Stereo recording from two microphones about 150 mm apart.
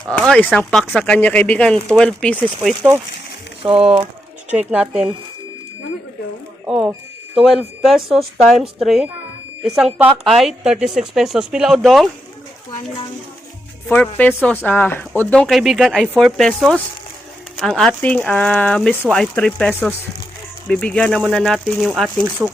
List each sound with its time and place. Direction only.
0.1 s a woman's voice: 5° left (ahead or behind)
3.6 s speech: 35° right (ahead or behind)
4.5 s speech: 5° right (ahead or behind)
6.7 s a woman's voice: 5° right (ahead or behind)
13.8 s a woman's voice: 10° left (ahead or behind)
22.2 s speech: 10° right (ahead or behind)